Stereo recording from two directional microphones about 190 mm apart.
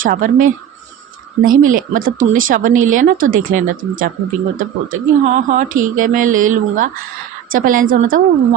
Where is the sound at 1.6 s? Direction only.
45° right (ahead or behind).